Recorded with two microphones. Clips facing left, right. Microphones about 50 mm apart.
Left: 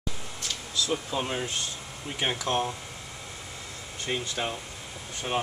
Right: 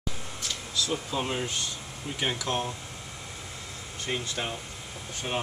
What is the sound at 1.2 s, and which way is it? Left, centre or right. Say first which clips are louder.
Speech: even; centre.